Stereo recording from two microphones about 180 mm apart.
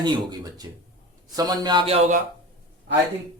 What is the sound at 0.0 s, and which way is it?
Speech, 20° right (ahead or behind).